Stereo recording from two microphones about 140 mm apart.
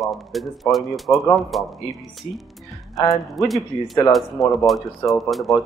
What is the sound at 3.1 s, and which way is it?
Speech, centre (ahead or behind).